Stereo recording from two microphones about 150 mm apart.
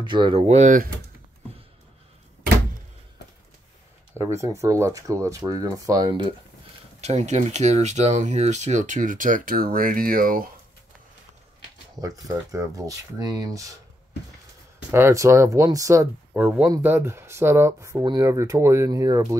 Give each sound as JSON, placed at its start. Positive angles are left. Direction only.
{"t": 0.0, "sound": "speech", "side_deg": -30}
{"t": 4.2, "sound": "speech", "side_deg": -20}
{"t": 7.0, "sound": "speech", "side_deg": -45}
{"t": 11.9, "sound": "speech", "side_deg": -25}
{"t": 14.9, "sound": "speech", "side_deg": -15}
{"t": 16.3, "sound": "speech", "side_deg": -10}